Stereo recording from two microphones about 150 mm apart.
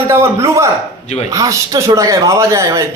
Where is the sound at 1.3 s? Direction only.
20° right (ahead or behind).